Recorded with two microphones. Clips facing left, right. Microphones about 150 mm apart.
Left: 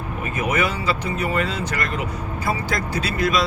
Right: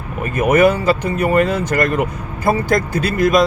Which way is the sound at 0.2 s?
55° right (ahead or behind).